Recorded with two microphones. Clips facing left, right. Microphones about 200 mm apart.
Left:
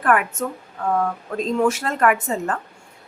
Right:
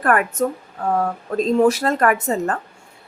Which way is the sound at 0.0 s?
40° right (ahead or behind).